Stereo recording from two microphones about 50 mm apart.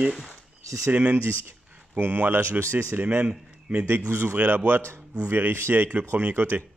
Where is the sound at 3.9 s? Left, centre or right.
Right.